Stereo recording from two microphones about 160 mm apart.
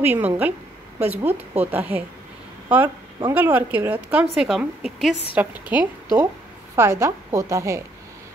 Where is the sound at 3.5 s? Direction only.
10° right (ahead or behind).